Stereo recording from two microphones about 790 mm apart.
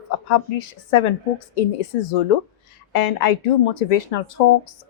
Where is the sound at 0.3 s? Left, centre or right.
Left.